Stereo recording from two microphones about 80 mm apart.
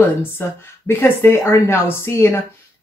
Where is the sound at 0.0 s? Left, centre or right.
Left.